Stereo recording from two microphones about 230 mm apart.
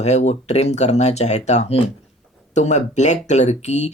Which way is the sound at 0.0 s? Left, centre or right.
Left.